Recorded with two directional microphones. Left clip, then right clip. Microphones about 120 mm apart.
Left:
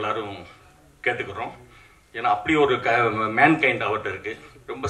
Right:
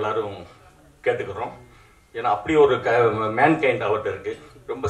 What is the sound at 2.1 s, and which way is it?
A man's voice, 35° left (ahead or behind).